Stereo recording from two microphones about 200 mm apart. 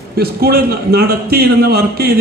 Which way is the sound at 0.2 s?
50° right (ahead or behind).